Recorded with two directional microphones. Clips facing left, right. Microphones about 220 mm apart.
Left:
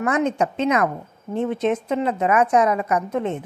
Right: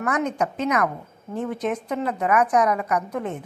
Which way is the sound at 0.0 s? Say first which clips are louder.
Left 3 dB; 25° left (ahead or behind).